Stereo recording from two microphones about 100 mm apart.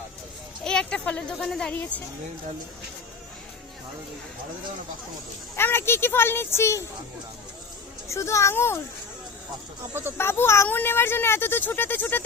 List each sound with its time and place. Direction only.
0.6 s a sound: 10° left (ahead or behind)
5.5 s speech: 25° left (ahead or behind)
8.0 s speech: 30° left (ahead or behind)
9.9 s speech: 20° right (ahead or behind)
10.2 s speech: 25° left (ahead or behind)